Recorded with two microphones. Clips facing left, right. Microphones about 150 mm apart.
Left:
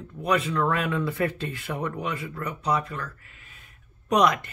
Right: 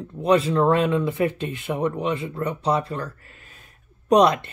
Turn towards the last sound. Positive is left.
turn(degrees=-30)  # may be behind; listen again after turning